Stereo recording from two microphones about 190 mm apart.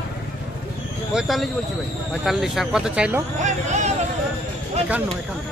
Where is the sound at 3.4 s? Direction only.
35° right (ahead or behind).